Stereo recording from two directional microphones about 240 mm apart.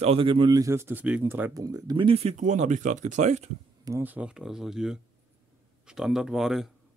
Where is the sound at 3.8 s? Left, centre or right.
Centre.